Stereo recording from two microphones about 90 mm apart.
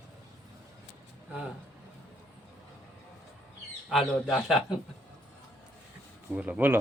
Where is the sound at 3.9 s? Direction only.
5° right (ahead or behind).